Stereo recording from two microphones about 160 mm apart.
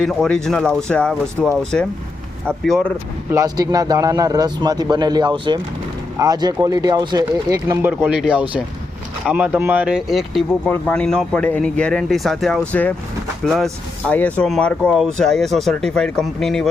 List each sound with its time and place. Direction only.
0.0 s speech: 5° left (ahead or behind)
3.3 s speech: 25° right (ahead or behind); by 16.6 s 5° left (ahead or behind)